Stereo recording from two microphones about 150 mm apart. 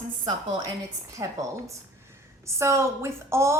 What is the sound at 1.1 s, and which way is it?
A woman's voice, 20° right (ahead or behind).